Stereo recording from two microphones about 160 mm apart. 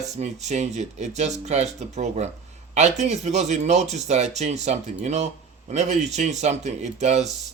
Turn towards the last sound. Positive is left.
turn(degrees=-45)  # may be behind; listen again after turning